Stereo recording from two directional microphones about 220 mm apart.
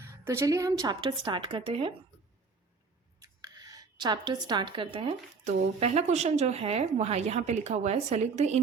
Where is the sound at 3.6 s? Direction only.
15° right (ahead or behind).